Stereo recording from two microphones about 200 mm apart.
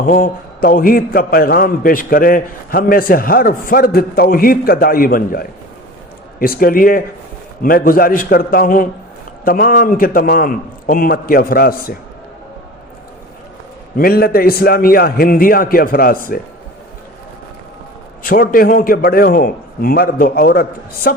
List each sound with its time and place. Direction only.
0.0 s a man's voice: 45° left (ahead or behind)
13.9 s a man's voice: 45° left (ahead or behind)
18.2 s a man's voice: 45° left (ahead or behind)